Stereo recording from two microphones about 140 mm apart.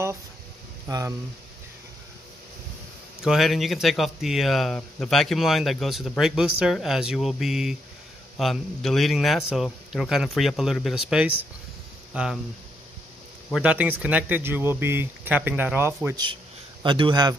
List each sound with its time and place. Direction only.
0.8 s speech: 25° right (ahead or behind)
3.2 s speech: centre (ahead or behind)
13.6 s speech: 10° right (ahead or behind)
16.8 s speech: 35° right (ahead or behind)